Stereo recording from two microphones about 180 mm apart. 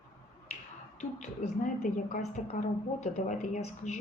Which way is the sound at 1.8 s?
45° left (ahead or behind).